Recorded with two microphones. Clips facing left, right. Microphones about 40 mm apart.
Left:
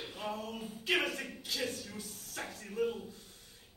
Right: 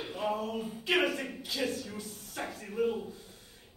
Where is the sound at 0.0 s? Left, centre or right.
Centre.